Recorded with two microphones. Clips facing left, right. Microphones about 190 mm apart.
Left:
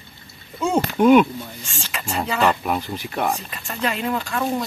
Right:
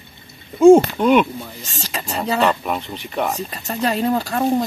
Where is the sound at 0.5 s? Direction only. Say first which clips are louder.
Right 13 dB; 50° right (ahead or behind).